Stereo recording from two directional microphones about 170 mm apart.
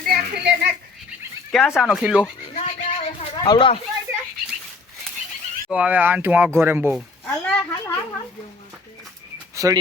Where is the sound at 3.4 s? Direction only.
25° left (ahead or behind).